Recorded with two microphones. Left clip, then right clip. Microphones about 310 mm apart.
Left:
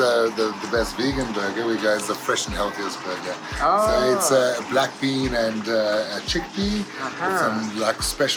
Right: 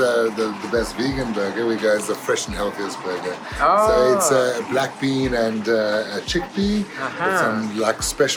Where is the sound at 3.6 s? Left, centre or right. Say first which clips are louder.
Right 3 dB; right.